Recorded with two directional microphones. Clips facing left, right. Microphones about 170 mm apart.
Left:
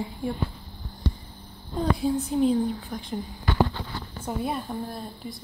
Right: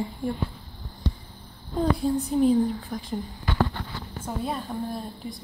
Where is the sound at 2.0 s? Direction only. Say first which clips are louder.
Even; centre (ahead or behind).